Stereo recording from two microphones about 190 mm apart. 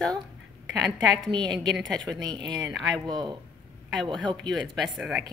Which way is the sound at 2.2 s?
20° right (ahead or behind).